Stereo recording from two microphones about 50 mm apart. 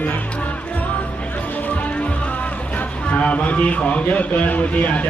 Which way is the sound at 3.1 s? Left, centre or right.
Left.